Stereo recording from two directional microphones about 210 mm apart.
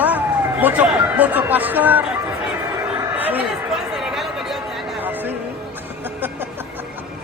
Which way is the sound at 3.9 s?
Centre (ahead or behind).